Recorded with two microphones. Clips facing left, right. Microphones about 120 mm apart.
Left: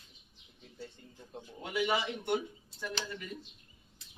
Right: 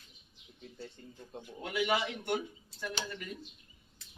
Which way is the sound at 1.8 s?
Centre (ahead or behind).